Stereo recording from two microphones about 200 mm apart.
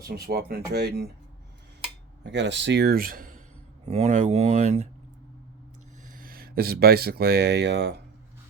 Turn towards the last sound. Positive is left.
turn(degrees=-60)  # may be behind; listen again after turning